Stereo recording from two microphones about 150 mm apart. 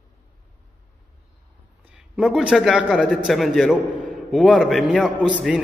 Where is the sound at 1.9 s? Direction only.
5° right (ahead or behind).